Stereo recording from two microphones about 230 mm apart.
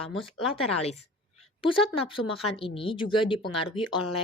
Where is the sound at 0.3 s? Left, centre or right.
Left.